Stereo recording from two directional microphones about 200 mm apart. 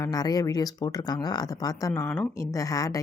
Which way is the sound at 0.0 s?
20° left (ahead or behind).